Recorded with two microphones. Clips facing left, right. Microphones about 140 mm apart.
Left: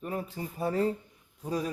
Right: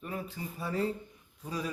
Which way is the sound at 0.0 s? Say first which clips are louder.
Left 4 dB; 40° left (ahead or behind).